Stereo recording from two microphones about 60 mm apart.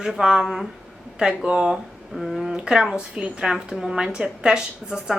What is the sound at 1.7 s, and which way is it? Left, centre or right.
Speech, centre.